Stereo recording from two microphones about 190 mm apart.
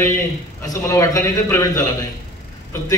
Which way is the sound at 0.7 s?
15° left (ahead or behind).